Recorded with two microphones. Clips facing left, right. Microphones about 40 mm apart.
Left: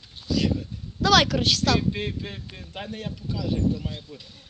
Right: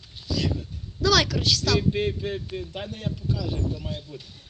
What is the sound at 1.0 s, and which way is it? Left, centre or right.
Speech, left.